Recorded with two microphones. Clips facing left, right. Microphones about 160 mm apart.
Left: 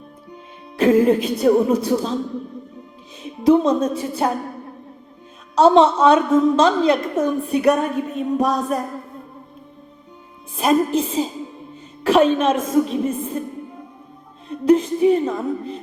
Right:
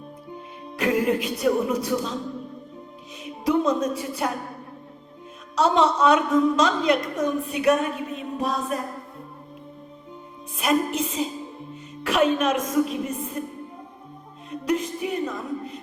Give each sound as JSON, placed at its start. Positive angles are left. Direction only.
{"t": 0.8, "sound": "music", "side_deg": 30}
{"t": 3.5, "sound": "a woman's voice", "side_deg": 30}
{"t": 5.5, "sound": "a woman's voice", "side_deg": 30}
{"t": 8.4, "sound": "music", "side_deg": 40}
{"t": 10.6, "sound": "music", "side_deg": 30}
{"t": 12.0, "sound": "a woman's voice", "side_deg": 30}
{"t": 14.6, "sound": "a woman's voice", "side_deg": 30}